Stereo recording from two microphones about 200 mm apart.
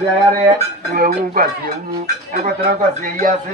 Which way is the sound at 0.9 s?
50° right (ahead or behind).